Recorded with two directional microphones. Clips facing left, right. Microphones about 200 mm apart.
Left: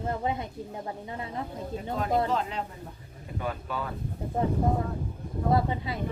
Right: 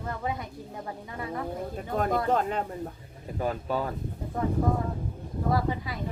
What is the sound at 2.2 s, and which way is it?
Speech, 50° right (ahead or behind).